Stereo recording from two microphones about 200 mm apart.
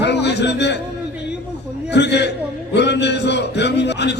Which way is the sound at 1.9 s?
60° left (ahead or behind).